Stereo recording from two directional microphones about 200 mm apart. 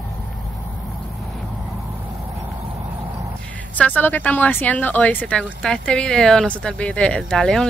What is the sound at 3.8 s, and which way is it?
Speech, 10° left (ahead or behind).